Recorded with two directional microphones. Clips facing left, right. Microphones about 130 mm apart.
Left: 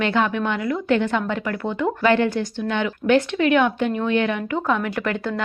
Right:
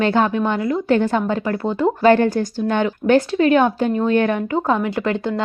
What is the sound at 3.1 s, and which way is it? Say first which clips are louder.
A woman's voice: right 3 dB; 30° right (ahead or behind).